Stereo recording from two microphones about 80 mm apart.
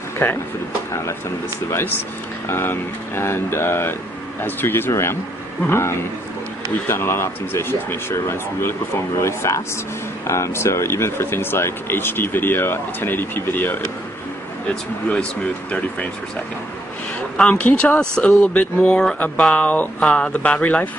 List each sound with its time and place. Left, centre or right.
0.2 s speech: left
1.7 s speech: left
17.4 s speech: centre